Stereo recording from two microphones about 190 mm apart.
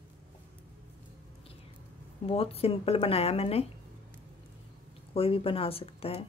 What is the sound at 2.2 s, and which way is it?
Speech, 30° left (ahead or behind).